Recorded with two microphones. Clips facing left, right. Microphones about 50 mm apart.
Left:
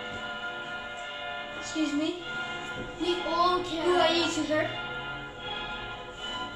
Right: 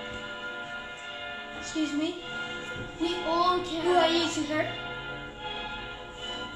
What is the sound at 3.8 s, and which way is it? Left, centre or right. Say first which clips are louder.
Speech: right 1 dB; right.